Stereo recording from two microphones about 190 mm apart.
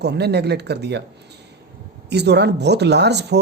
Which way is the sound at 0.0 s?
60° right (ahead or behind).